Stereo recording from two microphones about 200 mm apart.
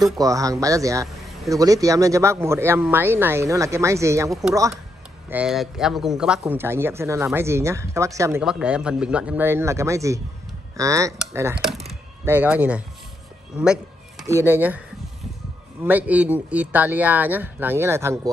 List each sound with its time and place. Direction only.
0.2 s speech: 15° right (ahead or behind)
5.3 s speech: 5° right (ahead or behind)
8.4 s speech: 5° right (ahead or behind)
15.8 s speech: 10° right (ahead or behind)